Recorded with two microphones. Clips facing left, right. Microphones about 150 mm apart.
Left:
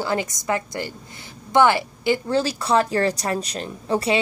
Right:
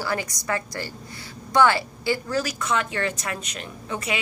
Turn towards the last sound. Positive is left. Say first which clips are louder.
# left 8 dB
turn(degrees=35)  # may be behind; listen again after turning